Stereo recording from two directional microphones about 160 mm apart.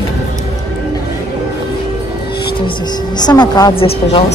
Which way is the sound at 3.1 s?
25° left (ahead or behind).